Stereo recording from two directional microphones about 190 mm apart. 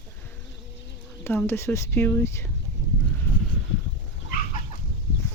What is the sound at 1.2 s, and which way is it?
Speech, 10° left (ahead or behind).